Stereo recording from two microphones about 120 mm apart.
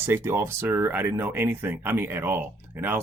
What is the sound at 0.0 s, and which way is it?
Speech, 20° right (ahead or behind).